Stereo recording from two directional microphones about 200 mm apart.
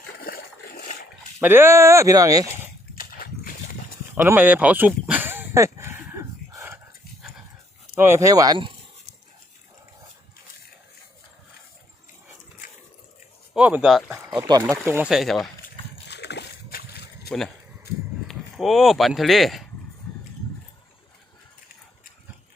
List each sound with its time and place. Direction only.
0.2 s a sound: 45° left (ahead or behind)
1.4 s speech: 10° right (ahead or behind)
2.9 s a sound: 45° left (ahead or behind)
4.1 s livestock: 10° right (ahead or behind)
7.9 s speech: 10° right (ahead or behind)
13.5 s speech: 5° right (ahead or behind)
14.3 s speech: 20° right (ahead or behind); by 15.4 s centre (ahead or behind)
16.0 s a sound: 55° left (ahead or behind)
18.3 s speech: centre (ahead or behind)